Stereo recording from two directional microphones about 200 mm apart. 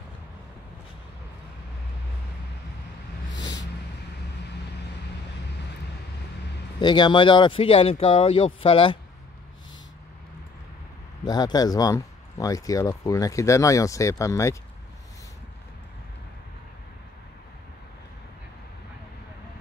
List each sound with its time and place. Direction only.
6.8 s speech: 20° left (ahead or behind)
11.2 s speech: 20° left (ahead or behind)